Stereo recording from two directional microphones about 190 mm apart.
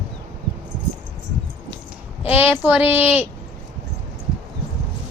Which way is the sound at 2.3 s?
10° right (ahead or behind).